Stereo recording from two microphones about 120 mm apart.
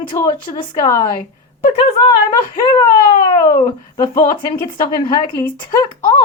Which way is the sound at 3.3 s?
40° left (ahead or behind).